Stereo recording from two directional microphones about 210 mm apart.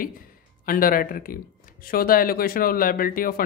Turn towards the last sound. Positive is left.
turn(degrees=45)  # may be behind; listen again after turning